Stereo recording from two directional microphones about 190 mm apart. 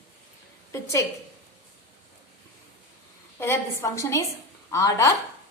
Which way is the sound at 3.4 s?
15° left (ahead or behind).